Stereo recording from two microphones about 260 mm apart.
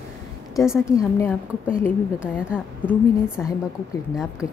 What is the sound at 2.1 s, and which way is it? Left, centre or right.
Speech, centre.